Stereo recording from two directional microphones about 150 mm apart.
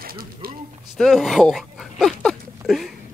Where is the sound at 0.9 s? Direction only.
Centre (ahead or behind).